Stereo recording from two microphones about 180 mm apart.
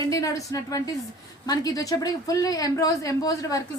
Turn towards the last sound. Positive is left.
turn(degrees=20)  # may be behind; listen again after turning